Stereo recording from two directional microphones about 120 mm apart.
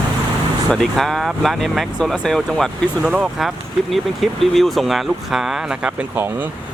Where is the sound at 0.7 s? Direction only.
5° left (ahead or behind).